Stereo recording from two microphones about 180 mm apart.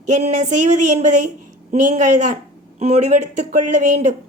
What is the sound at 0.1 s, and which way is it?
Speech, 40° right (ahead or behind).